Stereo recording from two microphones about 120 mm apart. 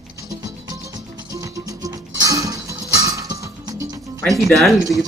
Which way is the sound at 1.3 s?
30° right (ahead or behind).